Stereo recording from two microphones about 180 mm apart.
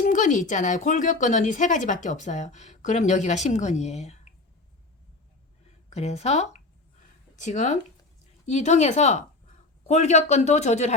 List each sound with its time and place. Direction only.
0.0 s speech: 45° left (ahead or behind)
5.9 s speech: 35° left (ahead or behind)